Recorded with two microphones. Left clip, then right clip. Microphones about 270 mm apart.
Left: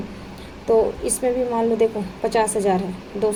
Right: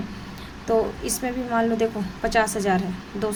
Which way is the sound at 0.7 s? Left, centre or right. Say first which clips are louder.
Left 4 dB; right.